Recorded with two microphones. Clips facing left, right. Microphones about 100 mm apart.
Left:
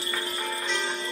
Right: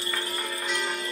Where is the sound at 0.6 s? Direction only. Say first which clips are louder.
Right 2 dB; 5° right (ahead or behind).